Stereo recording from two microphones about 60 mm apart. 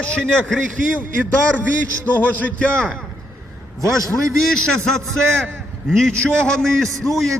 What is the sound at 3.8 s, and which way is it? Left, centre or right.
Speech, right.